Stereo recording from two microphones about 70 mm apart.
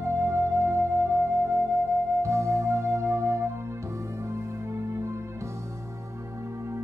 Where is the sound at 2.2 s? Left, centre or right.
Right.